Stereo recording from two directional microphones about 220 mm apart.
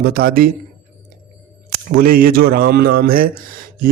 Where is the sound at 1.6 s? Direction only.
40° right (ahead or behind).